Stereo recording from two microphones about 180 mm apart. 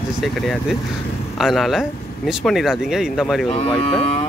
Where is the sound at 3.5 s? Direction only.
35° left (ahead or behind).